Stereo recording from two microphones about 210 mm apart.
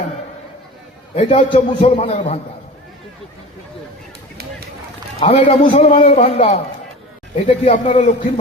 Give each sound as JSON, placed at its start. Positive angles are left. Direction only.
{"t": 1.1, "sound": "a man's voice", "side_deg": 30}
{"t": 5.2, "sound": "a man's voice", "side_deg": 30}